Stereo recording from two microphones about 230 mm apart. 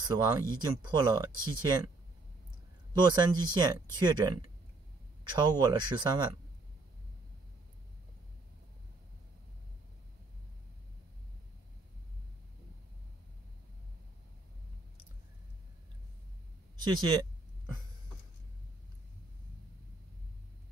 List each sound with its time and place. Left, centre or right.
0.0 s speech: centre
2.9 s speech: centre
16.8 s a sound: centre